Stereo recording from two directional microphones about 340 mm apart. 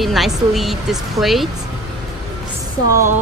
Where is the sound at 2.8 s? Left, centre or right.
Centre.